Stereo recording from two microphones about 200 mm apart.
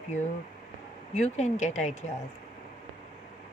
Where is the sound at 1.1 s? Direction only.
35° left (ahead or behind).